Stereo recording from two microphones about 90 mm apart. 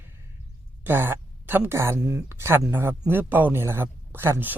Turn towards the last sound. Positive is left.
turn(degrees=-25)  # may be behind; listen again after turning